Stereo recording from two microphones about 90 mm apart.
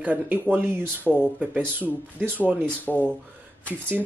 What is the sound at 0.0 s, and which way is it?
Speech, 20° right (ahead or behind).